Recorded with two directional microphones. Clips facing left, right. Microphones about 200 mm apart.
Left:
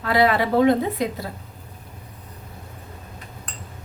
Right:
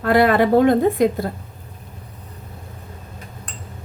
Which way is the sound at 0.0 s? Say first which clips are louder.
Right 4 dB; 50° right (ahead or behind).